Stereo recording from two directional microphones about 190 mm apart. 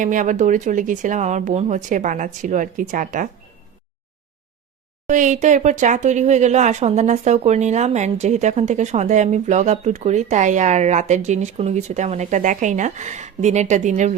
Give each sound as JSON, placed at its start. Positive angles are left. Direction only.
{"t": 0.0, "sound": "speech", "side_deg": -45}
{"t": 5.0, "sound": "speech", "side_deg": -40}